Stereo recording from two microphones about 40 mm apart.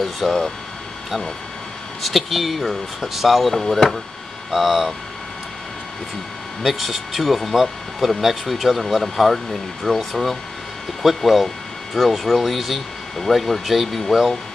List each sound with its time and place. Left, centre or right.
0.2 s speech: centre
2.0 s speech: centre
4.5 s speech: centre
6.6 s speech: centre